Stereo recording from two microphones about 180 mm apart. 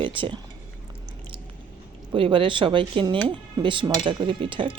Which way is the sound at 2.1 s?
30° right (ahead or behind).